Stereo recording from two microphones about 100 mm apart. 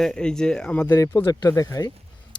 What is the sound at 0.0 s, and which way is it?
Speech, 10° left (ahead or behind).